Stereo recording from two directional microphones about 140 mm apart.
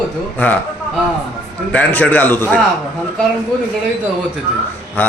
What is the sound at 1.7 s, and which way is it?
Speech, 10° left (ahead or behind).